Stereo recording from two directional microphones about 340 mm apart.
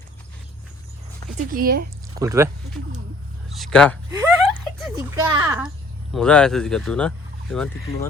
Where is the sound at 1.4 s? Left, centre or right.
Right.